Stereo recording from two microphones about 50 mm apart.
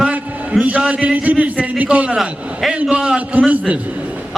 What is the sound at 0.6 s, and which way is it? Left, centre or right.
A man's voice, right.